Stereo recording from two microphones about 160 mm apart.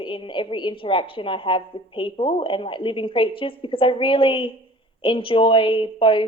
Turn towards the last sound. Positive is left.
turn(degrees=30)  # may be behind; listen again after turning